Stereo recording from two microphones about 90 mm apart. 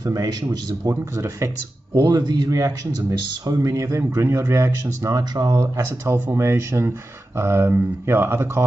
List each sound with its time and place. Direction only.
0.0 s a man's voice: 45° right (ahead or behind)
6.3 s speech: 30° right (ahead or behind)